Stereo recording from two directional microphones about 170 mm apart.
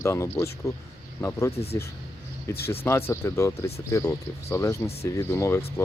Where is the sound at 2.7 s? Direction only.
15° left (ahead or behind).